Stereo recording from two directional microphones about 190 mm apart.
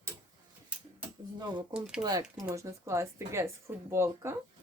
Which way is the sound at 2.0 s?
20° right (ahead or behind).